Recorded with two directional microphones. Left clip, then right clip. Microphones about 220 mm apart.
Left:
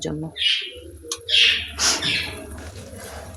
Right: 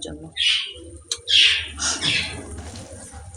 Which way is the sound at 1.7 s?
45° left (ahead or behind).